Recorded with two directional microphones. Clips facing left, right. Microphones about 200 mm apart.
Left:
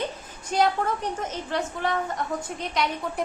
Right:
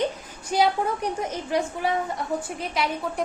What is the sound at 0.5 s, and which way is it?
A woman's voice, 10° right (ahead or behind).